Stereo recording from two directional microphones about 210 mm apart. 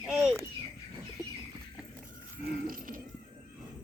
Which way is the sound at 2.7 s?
40° right (ahead or behind).